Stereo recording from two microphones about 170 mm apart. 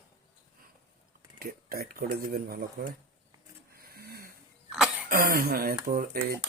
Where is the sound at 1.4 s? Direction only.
60° right (ahead or behind).